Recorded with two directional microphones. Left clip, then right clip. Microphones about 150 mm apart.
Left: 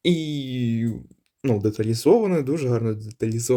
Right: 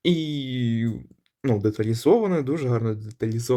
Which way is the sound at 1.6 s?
Centre (ahead or behind).